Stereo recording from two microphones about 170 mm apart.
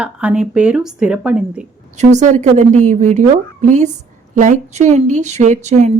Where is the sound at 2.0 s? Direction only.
45° right (ahead or behind).